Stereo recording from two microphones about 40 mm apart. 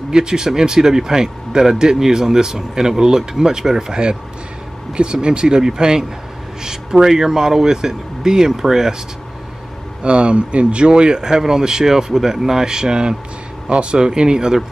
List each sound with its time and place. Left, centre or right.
0.1 s speech: centre
10.0 s speech: right